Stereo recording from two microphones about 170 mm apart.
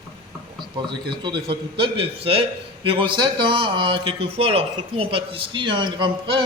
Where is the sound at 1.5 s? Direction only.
30° right (ahead or behind).